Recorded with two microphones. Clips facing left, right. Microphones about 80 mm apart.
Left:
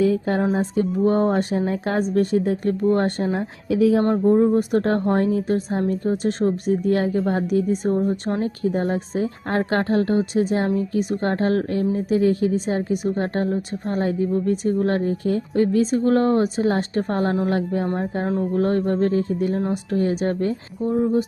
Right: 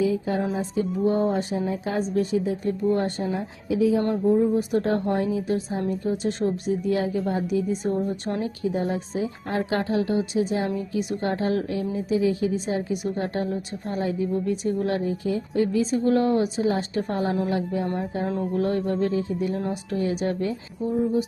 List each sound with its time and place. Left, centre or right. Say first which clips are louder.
0.0 s speech: left 4 dB; left
4.1 s a woman's voice: left 4 dB; left